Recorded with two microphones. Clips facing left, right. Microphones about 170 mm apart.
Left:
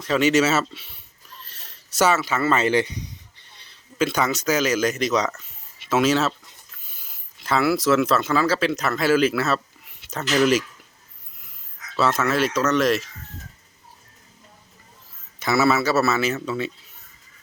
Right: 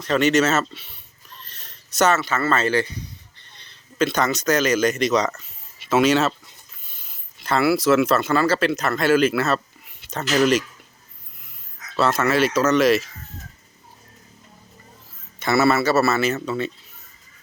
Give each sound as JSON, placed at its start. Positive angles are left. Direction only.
{"t": 0.0, "sound": "a man's voice", "side_deg": 5}
{"t": 11.9, "sound": "a man's voice", "side_deg": 0}
{"t": 15.4, "sound": "a man's voice", "side_deg": 0}